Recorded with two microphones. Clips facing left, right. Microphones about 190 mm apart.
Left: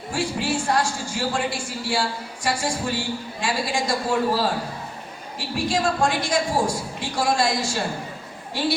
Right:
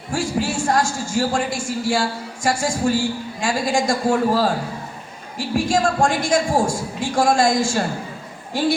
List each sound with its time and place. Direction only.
0.1 s a man's voice: 45° right (ahead or behind)
5.5 s a man's voice: 45° right (ahead or behind)